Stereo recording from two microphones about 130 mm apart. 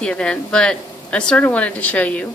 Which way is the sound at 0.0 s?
5° left (ahead or behind).